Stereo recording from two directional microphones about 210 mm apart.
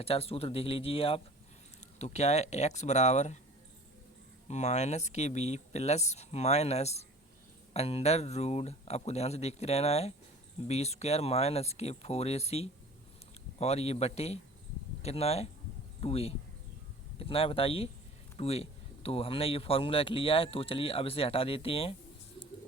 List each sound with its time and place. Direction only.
0.0 s speech: 25° left (ahead or behind)
4.4 s speech: 35° left (ahead or behind)